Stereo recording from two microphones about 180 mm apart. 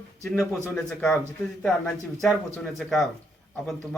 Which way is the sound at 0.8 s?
5° left (ahead or behind).